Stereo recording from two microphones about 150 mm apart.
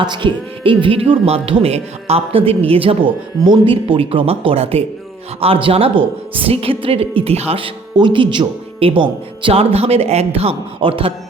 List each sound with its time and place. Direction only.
0.0 s a woman's voice: 30° right (ahead or behind)